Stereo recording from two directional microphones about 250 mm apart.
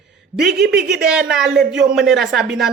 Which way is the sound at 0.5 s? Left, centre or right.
Right.